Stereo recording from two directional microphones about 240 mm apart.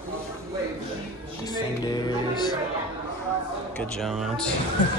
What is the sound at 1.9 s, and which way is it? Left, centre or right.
Music, centre.